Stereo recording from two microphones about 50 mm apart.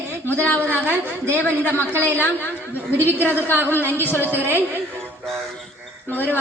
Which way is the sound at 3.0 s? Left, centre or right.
Right.